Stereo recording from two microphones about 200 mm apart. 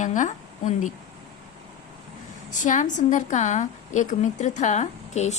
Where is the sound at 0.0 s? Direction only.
35° left (ahead or behind).